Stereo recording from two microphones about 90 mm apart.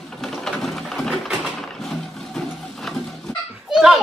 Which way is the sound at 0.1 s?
5° left (ahead or behind).